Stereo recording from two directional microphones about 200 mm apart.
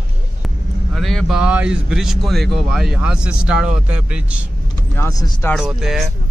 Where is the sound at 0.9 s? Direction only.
Centre (ahead or behind).